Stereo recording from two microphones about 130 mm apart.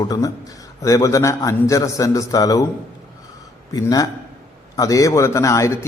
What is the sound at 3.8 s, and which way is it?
A man's voice, 30° left (ahead or behind).